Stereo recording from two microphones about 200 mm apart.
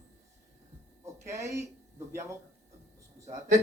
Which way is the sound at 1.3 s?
15° right (ahead or behind).